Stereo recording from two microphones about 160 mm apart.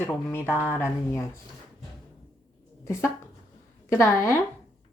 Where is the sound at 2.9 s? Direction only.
15° left (ahead or behind).